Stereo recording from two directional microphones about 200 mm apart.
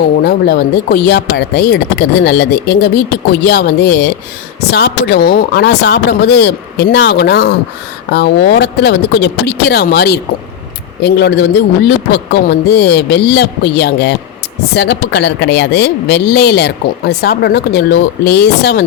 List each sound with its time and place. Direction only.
0.2 s speech: 55° left (ahead or behind)